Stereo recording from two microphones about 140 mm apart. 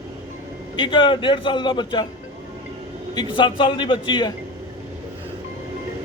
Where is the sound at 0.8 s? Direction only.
35° left (ahead or behind).